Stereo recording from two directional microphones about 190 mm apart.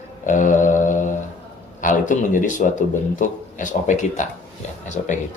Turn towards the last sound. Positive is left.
turn(degrees=40)  # may be behind; listen again after turning